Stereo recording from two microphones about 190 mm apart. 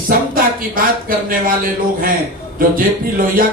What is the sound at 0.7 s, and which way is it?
Speech, 50° right (ahead or behind).